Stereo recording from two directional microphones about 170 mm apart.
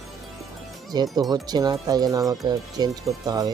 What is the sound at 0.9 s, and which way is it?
Speech, 25° right (ahead or behind).